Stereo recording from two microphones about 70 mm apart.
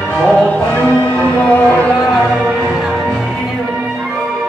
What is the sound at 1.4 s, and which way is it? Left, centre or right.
Music, left.